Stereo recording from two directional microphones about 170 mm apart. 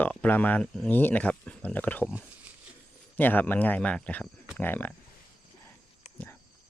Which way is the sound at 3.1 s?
10° left (ahead or behind).